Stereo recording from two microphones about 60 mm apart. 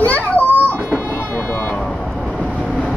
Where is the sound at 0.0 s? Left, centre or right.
Left.